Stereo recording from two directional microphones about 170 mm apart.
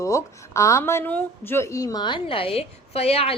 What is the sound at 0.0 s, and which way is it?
A woman's voice, 20° left (ahead or behind).